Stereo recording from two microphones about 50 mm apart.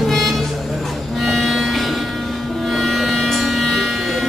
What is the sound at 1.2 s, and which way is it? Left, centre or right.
Music, centre.